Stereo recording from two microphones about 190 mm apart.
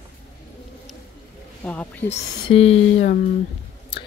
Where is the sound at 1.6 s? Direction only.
10° left (ahead or behind).